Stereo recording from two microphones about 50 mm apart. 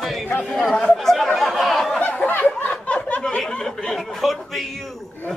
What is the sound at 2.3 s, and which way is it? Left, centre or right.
Snicker, left.